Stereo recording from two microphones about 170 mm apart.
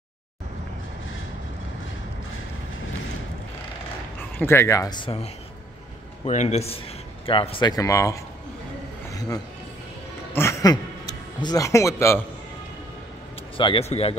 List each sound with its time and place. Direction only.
4.2 s a man's voice: 15° left (ahead or behind)
9.1 s a sound: 20° left (ahead or behind)
10.3 s speech: 20° left (ahead or behind)
13.6 s a man's voice: 35° left (ahead or behind)